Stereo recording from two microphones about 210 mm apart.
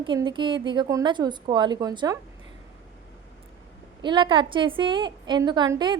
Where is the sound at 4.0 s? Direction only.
20° right (ahead or behind).